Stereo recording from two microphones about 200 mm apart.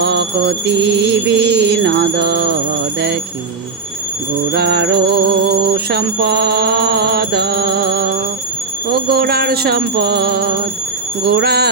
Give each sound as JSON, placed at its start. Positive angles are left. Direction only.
{"t": 0.0, "sound": "music", "side_deg": -55}
{"t": 4.5, "sound": "music", "side_deg": -55}